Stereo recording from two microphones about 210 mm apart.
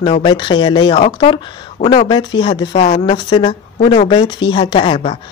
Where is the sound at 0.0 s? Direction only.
25° left (ahead or behind).